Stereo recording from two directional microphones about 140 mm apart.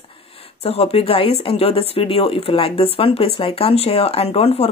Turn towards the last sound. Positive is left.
turn(degrees=45)  # may be behind; listen again after turning